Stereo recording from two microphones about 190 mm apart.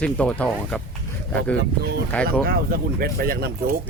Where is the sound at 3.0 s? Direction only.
50° right (ahead or behind).